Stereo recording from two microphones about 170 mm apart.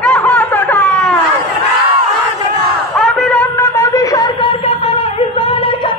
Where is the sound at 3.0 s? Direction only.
5° left (ahead or behind).